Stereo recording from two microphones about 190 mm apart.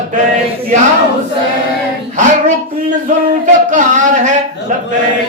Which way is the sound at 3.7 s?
40° right (ahead or behind).